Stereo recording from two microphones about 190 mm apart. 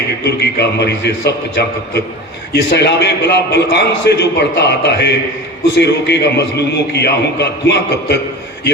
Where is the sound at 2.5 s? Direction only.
60° left (ahead or behind).